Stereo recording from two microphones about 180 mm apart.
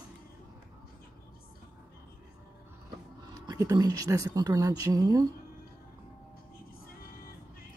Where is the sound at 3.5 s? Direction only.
20° right (ahead or behind).